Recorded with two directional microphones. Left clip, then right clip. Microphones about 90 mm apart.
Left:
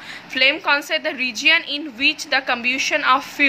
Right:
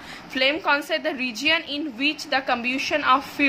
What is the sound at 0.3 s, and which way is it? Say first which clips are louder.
A woman's voice: left 4 dB; 15° right (ahead or behind).